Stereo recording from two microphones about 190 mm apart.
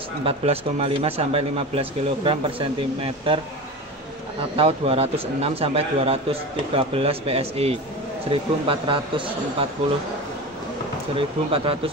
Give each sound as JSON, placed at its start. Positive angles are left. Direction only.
{"t": 0.2, "sound": "speech", "side_deg": -30}
{"t": 4.6, "sound": "a man's voice", "side_deg": -30}
{"t": 11.1, "sound": "speech", "side_deg": -30}